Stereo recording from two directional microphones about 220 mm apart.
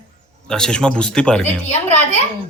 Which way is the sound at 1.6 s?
30° left (ahead or behind).